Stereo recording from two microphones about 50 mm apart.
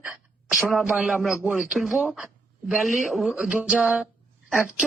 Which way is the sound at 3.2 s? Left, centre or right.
Centre.